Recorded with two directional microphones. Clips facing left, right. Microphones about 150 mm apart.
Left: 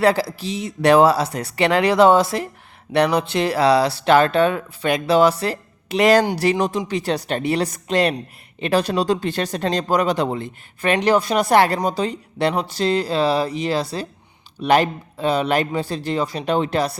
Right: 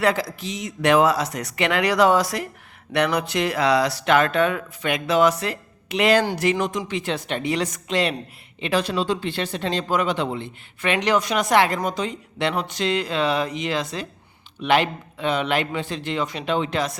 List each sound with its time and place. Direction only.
0.0 s speech: 30° left (ahead or behind)